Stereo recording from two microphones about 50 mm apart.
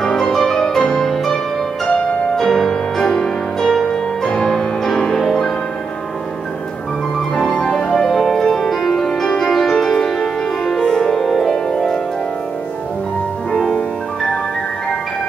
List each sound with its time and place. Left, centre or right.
0.0 s music: centre
7.3 s music: centre